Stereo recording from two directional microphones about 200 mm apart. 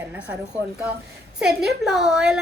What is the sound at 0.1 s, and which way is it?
A woman's voice, 5° right (ahead or behind).